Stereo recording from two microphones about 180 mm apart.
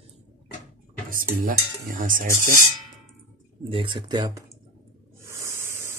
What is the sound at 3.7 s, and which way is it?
Speech, 25° right (ahead or behind).